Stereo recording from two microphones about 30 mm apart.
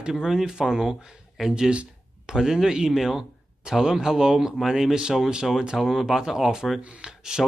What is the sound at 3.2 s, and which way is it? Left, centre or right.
Speech, centre.